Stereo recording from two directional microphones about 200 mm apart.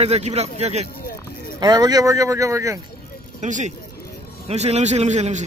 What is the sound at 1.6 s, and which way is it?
Speech, 20° right (ahead or behind).